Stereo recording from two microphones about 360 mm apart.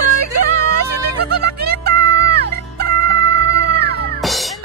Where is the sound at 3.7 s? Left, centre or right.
Right.